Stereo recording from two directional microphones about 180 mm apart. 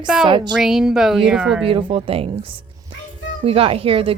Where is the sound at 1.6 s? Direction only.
30° right (ahead or behind).